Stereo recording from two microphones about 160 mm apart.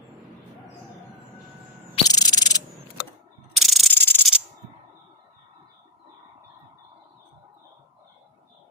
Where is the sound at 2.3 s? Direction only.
25° left (ahead or behind).